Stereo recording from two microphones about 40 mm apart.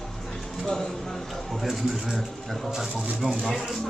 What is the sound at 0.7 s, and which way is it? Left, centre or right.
A man's voice, centre.